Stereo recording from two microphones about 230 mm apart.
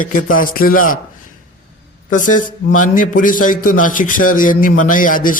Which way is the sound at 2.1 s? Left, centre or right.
Left.